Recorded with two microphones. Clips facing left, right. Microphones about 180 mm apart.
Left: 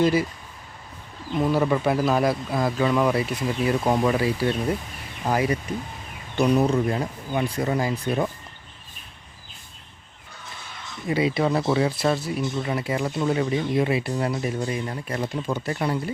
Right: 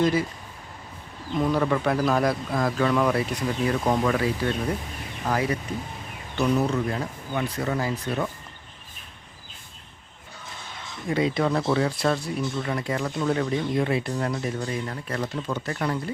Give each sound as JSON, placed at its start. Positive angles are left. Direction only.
{"t": 0.0, "sound": "speech", "side_deg": 10}
{"t": 1.4, "sound": "speech", "side_deg": 5}
{"t": 11.1, "sound": "speech", "side_deg": 5}